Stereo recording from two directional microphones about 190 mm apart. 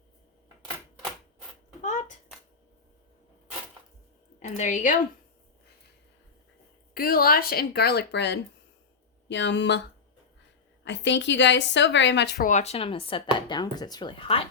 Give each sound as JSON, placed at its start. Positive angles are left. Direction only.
{"t": 1.8, "sound": "a sound", "side_deg": 40}
{"t": 4.4, "sound": "a woman's voice", "side_deg": 40}
{"t": 6.9, "sound": "a woman's voice", "side_deg": 50}
{"t": 10.8, "sound": "a woman's voice", "side_deg": 70}
{"t": 12.5, "sound": "speech", "side_deg": 35}